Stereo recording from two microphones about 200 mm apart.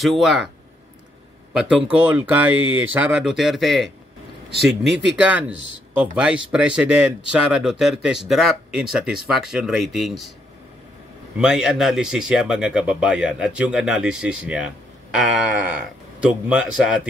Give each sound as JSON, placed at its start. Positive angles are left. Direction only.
{"t": 0.0, "sound": "speech", "side_deg": 0}
{"t": 1.5, "sound": "speech", "side_deg": -5}
{"t": 11.3, "sound": "speech", "side_deg": -5}